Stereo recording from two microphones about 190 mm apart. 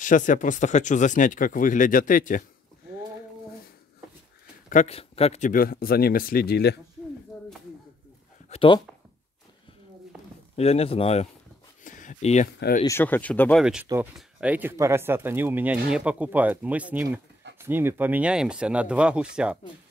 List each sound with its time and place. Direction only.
0.0 s speech: 45° left (ahead or behind)
4.6 s speech: 35° left (ahead or behind)
5.5 s speech: 50° left (ahead or behind)
8.5 s a sound: 30° left (ahead or behind)
10.5 s speech: 30° left (ahead or behind)
11.8 s a sound: 45° left (ahead or behind)
12.8 s speech: 10° left (ahead or behind); by 19.6 s 5° right (ahead or behind)